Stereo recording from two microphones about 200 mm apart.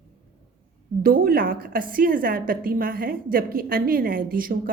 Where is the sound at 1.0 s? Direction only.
45° right (ahead or behind).